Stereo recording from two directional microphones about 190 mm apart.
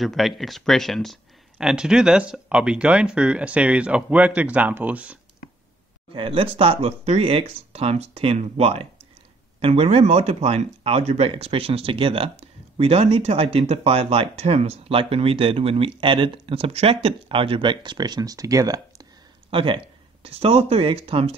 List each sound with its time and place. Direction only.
0.0 s speech: centre (ahead or behind)
6.1 s speech: 25° right (ahead or behind)